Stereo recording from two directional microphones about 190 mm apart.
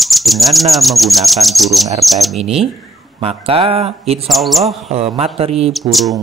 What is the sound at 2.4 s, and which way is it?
Speech, 30° right (ahead or behind).